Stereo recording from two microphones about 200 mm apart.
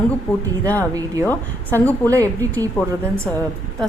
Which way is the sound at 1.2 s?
10° left (ahead or behind).